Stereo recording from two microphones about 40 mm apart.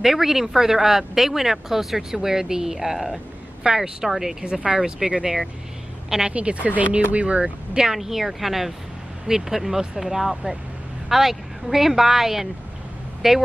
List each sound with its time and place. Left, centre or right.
0.0 s a woman's voice: centre
6.3 s speech: right
7.7 s a woman's voice: centre